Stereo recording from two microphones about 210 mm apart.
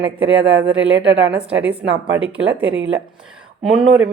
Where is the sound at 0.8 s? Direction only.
60° right (ahead or behind).